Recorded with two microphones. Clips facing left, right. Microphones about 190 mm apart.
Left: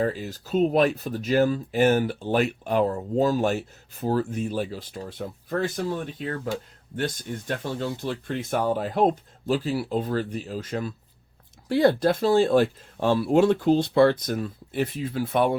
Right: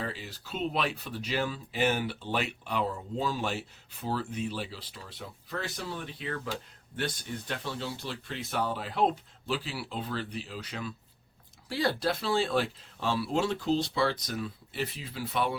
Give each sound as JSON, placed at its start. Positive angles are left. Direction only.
{"t": 0.0, "sound": "speech", "side_deg": 45}